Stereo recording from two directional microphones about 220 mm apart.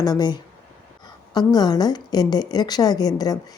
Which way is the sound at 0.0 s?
20° left (ahead or behind).